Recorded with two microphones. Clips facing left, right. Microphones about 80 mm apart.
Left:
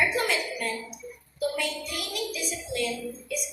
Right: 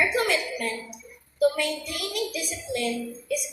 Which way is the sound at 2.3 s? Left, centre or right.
Right.